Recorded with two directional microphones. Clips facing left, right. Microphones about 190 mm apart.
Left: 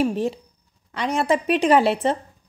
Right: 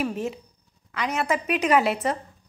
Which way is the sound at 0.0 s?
30° left (ahead or behind).